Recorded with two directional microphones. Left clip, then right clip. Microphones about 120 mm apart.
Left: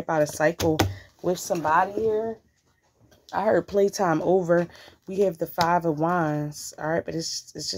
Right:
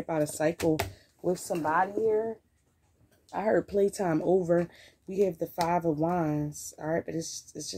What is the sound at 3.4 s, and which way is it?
Speech, 20° right (ahead or behind).